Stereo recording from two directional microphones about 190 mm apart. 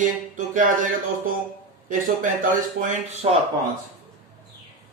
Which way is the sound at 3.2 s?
30° right (ahead or behind).